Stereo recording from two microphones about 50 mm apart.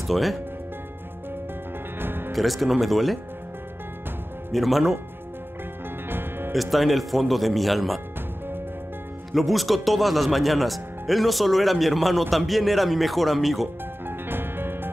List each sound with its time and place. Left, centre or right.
0.1 s speech: centre
2.0 s music: right
2.3 s speech: centre
4.5 s speech: centre
6.0 s music: right
6.5 s speech: centre
9.3 s speech: centre
14.0 s music: right